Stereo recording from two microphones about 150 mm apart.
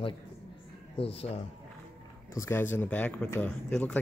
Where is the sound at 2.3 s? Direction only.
15° left (ahead or behind).